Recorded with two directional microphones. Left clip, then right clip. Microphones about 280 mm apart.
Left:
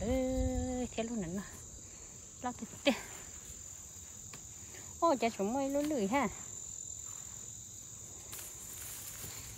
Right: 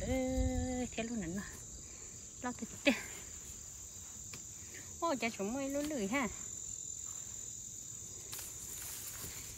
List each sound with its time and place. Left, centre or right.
0.0 s cricket: centre
5.0 s cricket: centre